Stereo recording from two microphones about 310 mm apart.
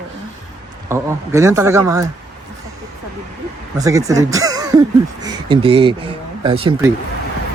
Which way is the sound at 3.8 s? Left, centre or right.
Centre.